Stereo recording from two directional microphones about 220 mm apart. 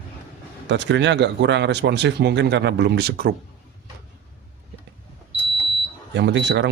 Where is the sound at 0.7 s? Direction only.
55° right (ahead or behind).